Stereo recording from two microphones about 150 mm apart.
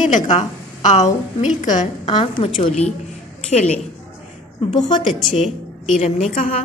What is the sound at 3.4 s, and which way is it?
A woman's voice, 45° left (ahead or behind).